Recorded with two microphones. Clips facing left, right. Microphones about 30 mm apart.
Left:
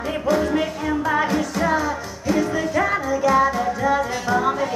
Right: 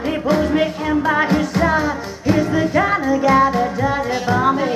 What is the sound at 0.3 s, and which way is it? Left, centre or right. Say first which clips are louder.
Music: right 3 dB; right.